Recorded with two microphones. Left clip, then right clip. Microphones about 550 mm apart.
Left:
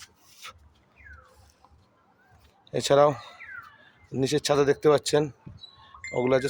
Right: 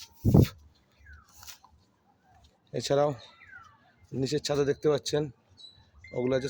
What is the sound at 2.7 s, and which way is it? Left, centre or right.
Speech, right.